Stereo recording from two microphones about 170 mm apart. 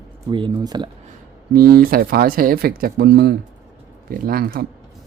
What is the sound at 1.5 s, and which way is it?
Speech, 60° right (ahead or behind).